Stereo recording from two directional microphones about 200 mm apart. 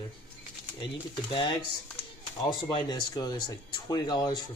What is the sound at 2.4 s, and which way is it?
Speech, 20° left (ahead or behind).